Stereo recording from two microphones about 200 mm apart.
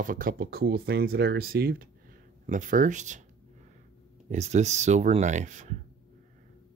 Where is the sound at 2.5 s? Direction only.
40° right (ahead or behind).